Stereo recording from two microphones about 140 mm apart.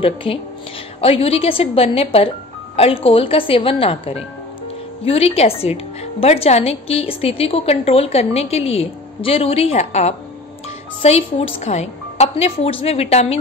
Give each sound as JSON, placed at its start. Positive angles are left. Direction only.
{"t": 0.0, "sound": "speech", "side_deg": 40}